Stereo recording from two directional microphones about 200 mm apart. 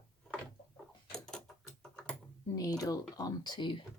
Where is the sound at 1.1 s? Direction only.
5° left (ahead or behind).